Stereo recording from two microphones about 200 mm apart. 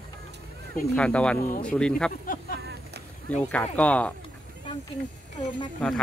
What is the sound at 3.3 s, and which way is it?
Speech, 5° left (ahead or behind).